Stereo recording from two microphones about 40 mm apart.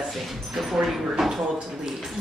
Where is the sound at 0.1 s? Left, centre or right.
Centre.